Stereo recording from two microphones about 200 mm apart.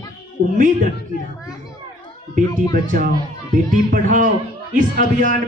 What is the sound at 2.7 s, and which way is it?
A man's voice, 40° right (ahead or behind).